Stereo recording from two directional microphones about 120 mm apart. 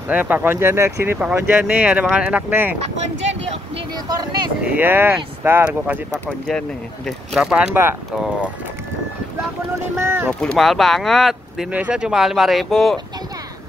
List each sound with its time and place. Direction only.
0.1 s speech: 15° right (ahead or behind)
2.8 s speech: 65° right (ahead or behind)
4.6 s speech: 15° right (ahead or behind)
6.2 s speech: 5° left (ahead or behind)
9.9 s speech: 20° right (ahead or behind)
10.4 s speech: 5° left (ahead or behind)